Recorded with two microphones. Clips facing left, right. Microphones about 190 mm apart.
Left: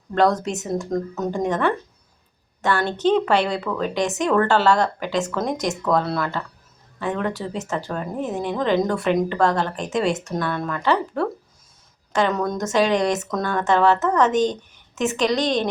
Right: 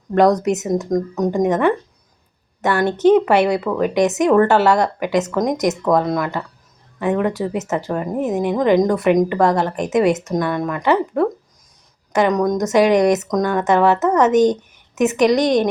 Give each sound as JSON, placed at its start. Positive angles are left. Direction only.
{"t": 0.1, "sound": "a woman's voice", "side_deg": -20}